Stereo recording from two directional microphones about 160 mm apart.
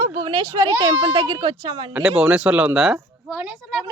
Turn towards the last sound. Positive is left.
turn(degrees=-5)  # may be behind; listen again after turning